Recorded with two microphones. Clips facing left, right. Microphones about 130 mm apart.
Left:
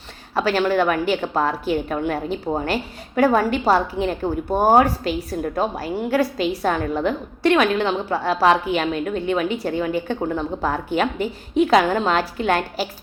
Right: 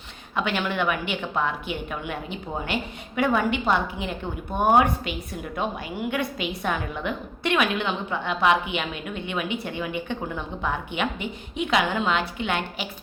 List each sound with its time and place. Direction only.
0.3 s a woman's voice: 35° left (ahead or behind)